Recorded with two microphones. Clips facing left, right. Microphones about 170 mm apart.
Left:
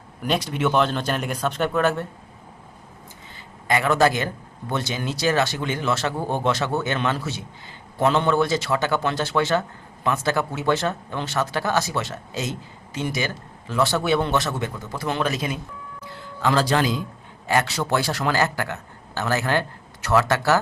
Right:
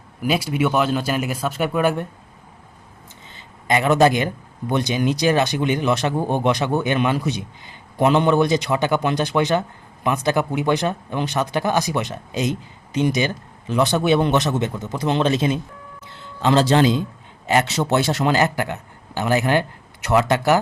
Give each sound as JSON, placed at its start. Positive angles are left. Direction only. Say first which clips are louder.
{"t": 0.2, "sound": "speech", "louder": "right 3 dB", "side_deg": -10}
{"t": 3.7, "sound": "a man's voice", "louder": "right 3 dB", "side_deg": -20}